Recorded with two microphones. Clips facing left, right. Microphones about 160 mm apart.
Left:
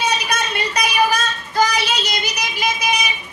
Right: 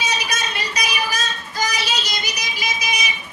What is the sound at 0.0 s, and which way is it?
Child singing, 60° left (ahead or behind).